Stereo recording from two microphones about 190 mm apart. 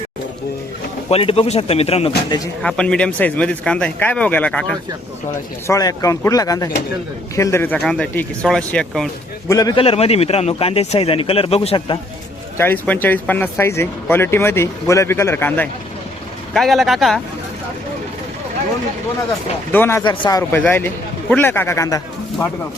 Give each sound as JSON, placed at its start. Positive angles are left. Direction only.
{"t": 1.1, "sound": "a man's voice", "side_deg": 30}
{"t": 2.6, "sound": "speech", "side_deg": 5}
{"t": 5.6, "sound": "speech", "side_deg": 15}
{"t": 9.5, "sound": "a man's voice", "side_deg": 20}
{"t": 12.5, "sound": "speech", "side_deg": 10}
{"t": 19.7, "sound": "speech", "side_deg": 10}
{"t": 20.1, "sound": "a man's voice", "side_deg": 25}
{"t": 20.5, "sound": "speech", "side_deg": 10}